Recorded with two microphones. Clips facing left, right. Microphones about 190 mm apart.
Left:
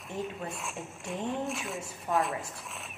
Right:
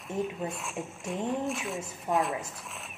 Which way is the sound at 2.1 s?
20° right (ahead or behind).